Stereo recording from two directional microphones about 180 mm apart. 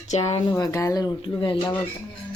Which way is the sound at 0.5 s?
15° left (ahead or behind).